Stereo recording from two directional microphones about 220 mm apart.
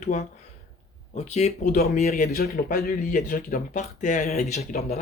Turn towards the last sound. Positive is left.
turn(degrees=30)  # may be behind; listen again after turning